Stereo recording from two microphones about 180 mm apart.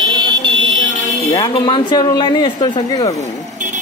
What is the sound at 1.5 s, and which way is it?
Speech, 25° left (ahead or behind).